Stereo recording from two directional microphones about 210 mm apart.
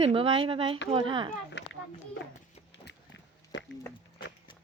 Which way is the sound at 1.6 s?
60° left (ahead or behind).